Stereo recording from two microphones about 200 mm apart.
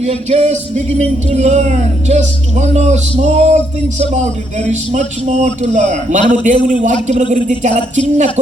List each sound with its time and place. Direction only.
0.0 s music: 30° right (ahead or behind)
4.7 s music: 35° right (ahead or behind)